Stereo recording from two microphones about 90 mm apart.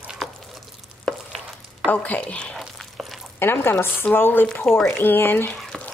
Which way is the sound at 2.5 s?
Centre (ahead or behind).